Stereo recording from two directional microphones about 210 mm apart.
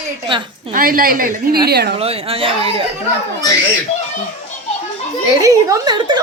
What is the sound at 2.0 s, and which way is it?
Speech, 30° right (ahead or behind).